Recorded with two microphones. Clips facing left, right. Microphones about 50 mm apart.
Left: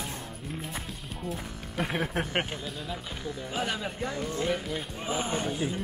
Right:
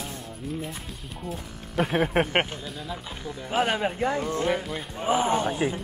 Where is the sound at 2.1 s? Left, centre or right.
Right.